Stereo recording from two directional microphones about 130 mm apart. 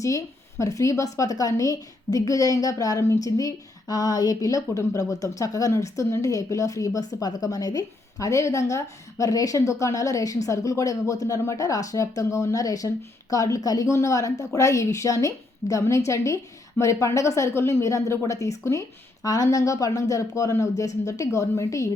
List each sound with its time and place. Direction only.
0.6 s a woman's voice: 25° left (ahead or behind)